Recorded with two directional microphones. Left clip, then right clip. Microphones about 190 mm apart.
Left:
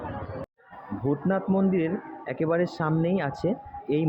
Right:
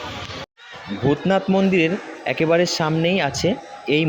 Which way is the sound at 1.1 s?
25° right (ahead or behind).